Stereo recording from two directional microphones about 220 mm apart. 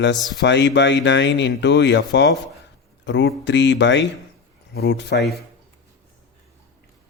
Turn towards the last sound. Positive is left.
turn(degrees=50)  # may be behind; listen again after turning